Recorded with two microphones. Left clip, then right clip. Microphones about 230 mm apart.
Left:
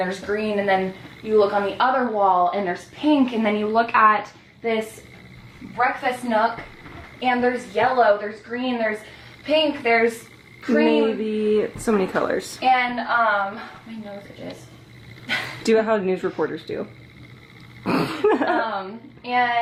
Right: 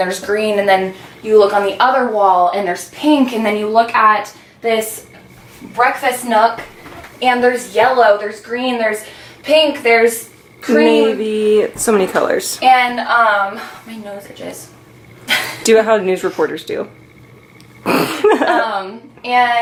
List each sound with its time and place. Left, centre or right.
0.2 s speech: centre
8.3 s speech: centre
15.3 s speech: centre
16.6 s speech: centre
18.1 s speech: centre